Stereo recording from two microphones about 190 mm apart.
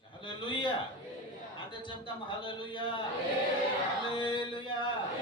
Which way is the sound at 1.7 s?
25° left (ahead or behind).